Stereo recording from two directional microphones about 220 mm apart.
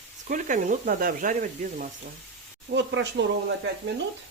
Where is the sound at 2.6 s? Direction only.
55° right (ahead or behind).